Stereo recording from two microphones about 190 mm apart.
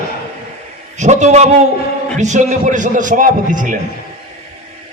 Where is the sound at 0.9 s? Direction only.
40° right (ahead or behind).